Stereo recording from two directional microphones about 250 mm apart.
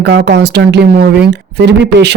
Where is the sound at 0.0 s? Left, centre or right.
Right.